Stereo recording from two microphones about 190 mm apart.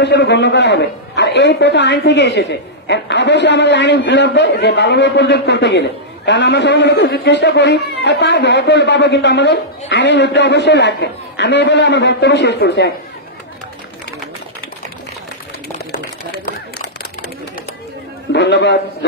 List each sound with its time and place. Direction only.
0.0 s a man's voice: 65° left (ahead or behind)
18.3 s a man's voice: 65° left (ahead or behind)